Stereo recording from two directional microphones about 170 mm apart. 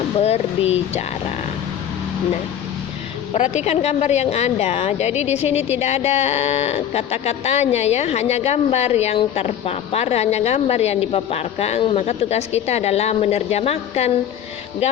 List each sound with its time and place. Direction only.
0.2 s a woman's voice: 40° left (ahead or behind)
3.3 s a woman's voice: 40° left (ahead or behind)